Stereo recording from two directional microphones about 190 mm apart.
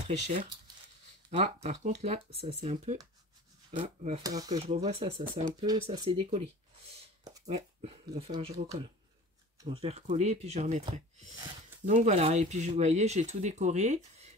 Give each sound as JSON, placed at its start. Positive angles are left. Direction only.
{"t": 1.4, "sound": "speech", "side_deg": -35}
{"t": 4.2, "sound": "speech", "side_deg": -20}
{"t": 7.4, "sound": "speech", "side_deg": -30}
{"t": 9.7, "sound": "speech", "side_deg": -30}
{"t": 11.8, "sound": "speech", "side_deg": -35}